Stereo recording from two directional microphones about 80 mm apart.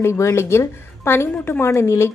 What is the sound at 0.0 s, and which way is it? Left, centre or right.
A woman's voice, left.